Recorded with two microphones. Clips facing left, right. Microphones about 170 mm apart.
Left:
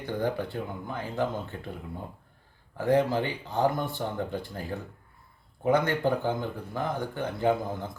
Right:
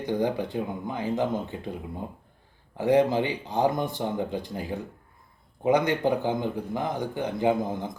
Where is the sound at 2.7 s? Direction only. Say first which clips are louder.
Right 3 dB; 15° right (ahead or behind).